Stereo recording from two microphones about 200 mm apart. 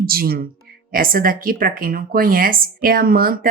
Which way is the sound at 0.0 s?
50° right (ahead or behind).